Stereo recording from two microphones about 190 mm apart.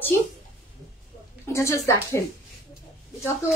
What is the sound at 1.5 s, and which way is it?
Speech, 15° left (ahead or behind).